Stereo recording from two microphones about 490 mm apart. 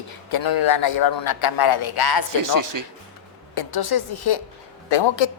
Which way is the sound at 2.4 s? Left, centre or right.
Right.